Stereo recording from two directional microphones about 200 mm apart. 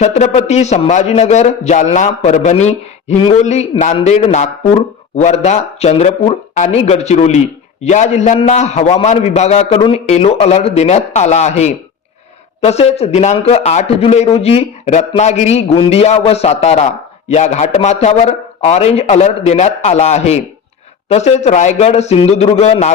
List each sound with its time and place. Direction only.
0.0 s a man's voice: 35° left (ahead or behind)